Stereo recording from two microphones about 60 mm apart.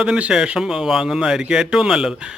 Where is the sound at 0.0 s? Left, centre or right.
Centre.